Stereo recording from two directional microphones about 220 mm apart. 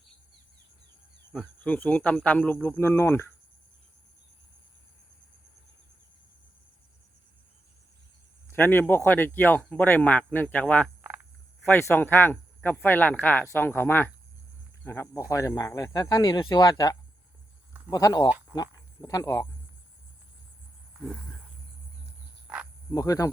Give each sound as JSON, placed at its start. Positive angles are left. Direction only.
{"t": 1.3, "sound": "speech", "side_deg": 5}
{"t": 8.4, "sound": "speech", "side_deg": 10}
{"t": 21.0, "sound": "a sound", "side_deg": 5}
{"t": 22.5, "sound": "cricket", "side_deg": -5}
{"t": 22.9, "sound": "speech", "side_deg": 15}